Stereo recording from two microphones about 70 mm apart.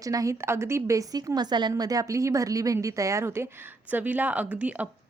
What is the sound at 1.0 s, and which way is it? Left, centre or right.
A woman's voice, right.